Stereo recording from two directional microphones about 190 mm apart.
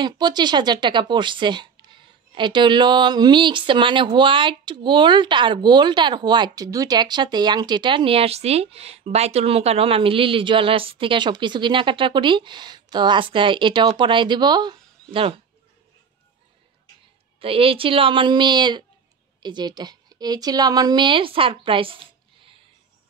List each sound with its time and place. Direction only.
0.0 s speech: 20° right (ahead or behind)
17.4 s a woman's voice: 30° right (ahead or behind)